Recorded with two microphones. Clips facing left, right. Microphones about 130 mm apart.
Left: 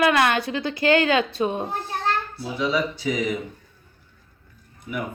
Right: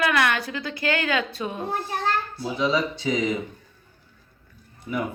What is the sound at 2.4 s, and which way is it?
Speech, 25° right (ahead or behind).